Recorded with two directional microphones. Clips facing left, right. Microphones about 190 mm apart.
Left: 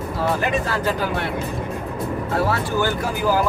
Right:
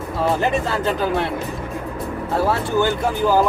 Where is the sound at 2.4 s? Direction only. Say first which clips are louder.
Right 3 dB; 25° right (ahead or behind).